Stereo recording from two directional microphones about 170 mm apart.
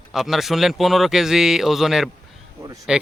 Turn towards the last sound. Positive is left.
turn(degrees=-5)  # may be behind; listen again after turning